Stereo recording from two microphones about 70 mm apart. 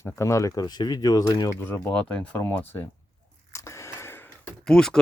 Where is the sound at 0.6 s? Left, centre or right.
Left.